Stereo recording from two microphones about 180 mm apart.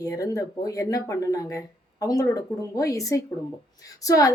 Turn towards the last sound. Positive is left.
turn(degrees=20)  # may be behind; listen again after turning